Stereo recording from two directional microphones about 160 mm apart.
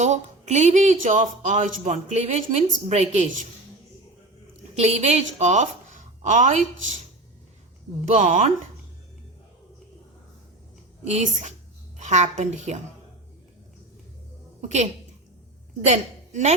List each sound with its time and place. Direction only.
0.0 s speech: 45° right (ahead or behind)
4.8 s speech: 45° right (ahead or behind)
8.0 s speech: 50° right (ahead or behind)
11.0 s a woman's voice: 45° right (ahead or behind)
14.6 s a woman's voice: 45° right (ahead or behind)
15.9 s a woman's voice: 45° right (ahead or behind)